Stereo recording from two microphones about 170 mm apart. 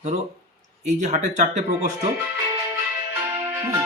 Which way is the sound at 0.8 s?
45° right (ahead or behind).